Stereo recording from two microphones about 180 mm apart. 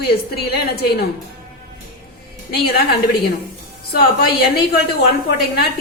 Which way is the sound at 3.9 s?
60° left (ahead or behind).